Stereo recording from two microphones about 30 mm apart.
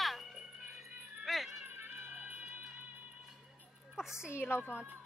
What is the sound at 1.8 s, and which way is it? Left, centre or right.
Music, right.